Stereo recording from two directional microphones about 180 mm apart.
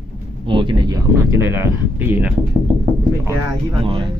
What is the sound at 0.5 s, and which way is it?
Speech, 25° right (ahead or behind).